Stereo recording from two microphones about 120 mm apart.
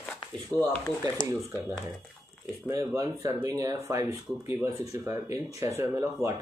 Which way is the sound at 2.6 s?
25° right (ahead or behind).